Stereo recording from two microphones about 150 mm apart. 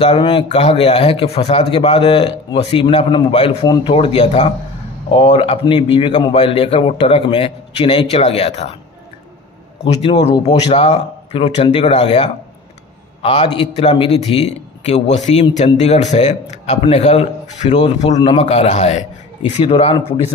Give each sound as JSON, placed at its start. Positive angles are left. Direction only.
{"t": 0.0, "sound": "a man's voice", "side_deg": 35}
{"t": 3.6, "sound": "a man's voice", "side_deg": 25}
{"t": 3.9, "sound": "a man's voice", "side_deg": 40}
{"t": 9.8, "sound": "a man's voice", "side_deg": 45}